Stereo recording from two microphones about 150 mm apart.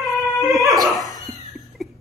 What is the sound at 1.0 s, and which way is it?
Cat, 25° left (ahead or behind).